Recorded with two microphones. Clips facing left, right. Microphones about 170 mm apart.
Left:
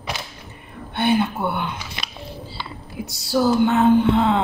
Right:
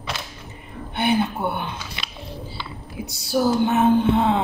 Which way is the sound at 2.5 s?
20° right (ahead or behind).